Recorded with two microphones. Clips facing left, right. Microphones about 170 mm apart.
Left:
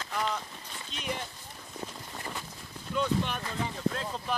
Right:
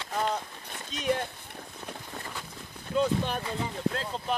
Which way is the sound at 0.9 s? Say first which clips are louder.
Right 8 dB; 55° right (ahead or behind).